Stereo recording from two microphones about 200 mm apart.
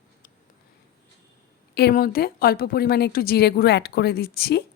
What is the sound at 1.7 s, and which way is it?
A woman's voice, 50° left (ahead or behind).